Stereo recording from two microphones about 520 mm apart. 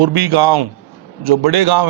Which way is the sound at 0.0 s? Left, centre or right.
Right.